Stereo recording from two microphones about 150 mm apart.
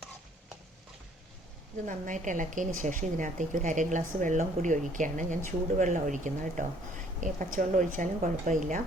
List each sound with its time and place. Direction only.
1.9 s a woman's voice: 55° right (ahead or behind)